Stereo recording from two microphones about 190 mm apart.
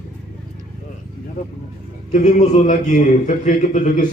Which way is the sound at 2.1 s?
40° left (ahead or behind).